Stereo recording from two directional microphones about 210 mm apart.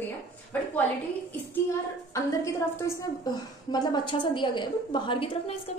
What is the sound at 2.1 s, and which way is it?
A woman's voice, 15° left (ahead or behind).